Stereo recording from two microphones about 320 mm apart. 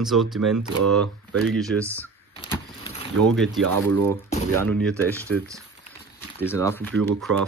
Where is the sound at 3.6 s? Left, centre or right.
Right.